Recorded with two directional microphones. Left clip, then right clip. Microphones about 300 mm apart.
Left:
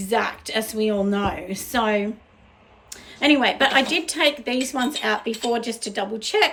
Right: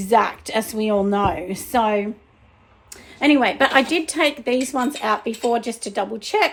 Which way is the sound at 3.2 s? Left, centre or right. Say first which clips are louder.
Right 2 dB; centre.